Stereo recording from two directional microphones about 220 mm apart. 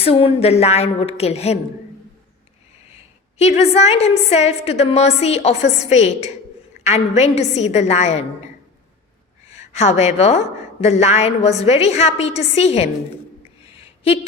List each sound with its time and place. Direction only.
0.0 s a woman's voice: 25° left (ahead or behind)
3.3 s a woman's voice: 30° left (ahead or behind)
9.7 s a woman's voice: 30° left (ahead or behind)